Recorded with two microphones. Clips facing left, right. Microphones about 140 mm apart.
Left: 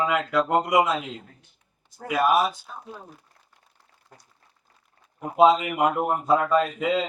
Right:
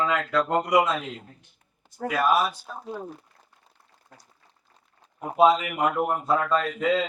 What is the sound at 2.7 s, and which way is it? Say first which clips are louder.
Speech: right 5 dB; 45° right (ahead or behind).